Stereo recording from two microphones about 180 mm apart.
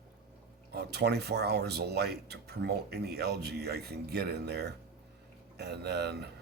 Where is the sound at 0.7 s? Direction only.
65° right (ahead or behind).